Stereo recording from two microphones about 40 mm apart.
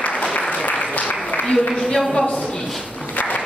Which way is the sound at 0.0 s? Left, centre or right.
Left.